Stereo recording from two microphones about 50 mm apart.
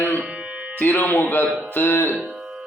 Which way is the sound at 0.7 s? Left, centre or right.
Left.